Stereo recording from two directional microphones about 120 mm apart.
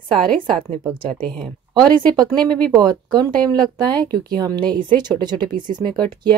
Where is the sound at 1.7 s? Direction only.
35° right (ahead or behind).